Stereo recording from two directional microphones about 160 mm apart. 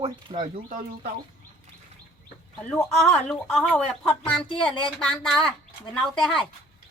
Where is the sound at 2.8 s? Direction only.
15° left (ahead or behind).